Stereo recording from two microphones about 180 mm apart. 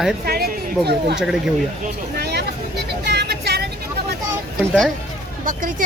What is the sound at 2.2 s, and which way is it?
Vehicle, 65° right (ahead or behind).